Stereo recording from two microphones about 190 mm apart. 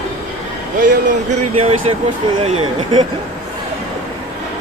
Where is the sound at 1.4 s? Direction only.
30° right (ahead or behind).